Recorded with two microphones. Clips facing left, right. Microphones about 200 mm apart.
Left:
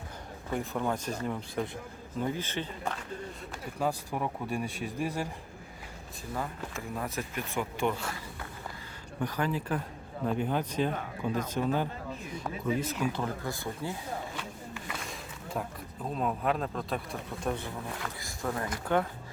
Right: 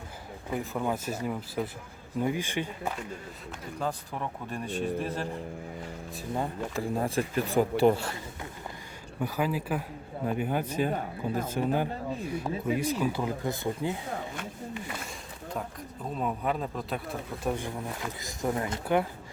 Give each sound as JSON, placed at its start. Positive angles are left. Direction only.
{"t": 0.5, "sound": "speech", "side_deg": 0}
{"t": 3.8, "sound": "speech", "side_deg": 10}
{"t": 6.3, "sound": "speech", "side_deg": -30}
{"t": 9.2, "sound": "speech", "side_deg": -5}
{"t": 16.1, "sound": "speech", "side_deg": 0}
{"t": 18.2, "sound": "speech", "side_deg": -20}